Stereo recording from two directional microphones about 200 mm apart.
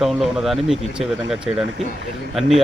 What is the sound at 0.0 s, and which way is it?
Speech, centre (ahead or behind).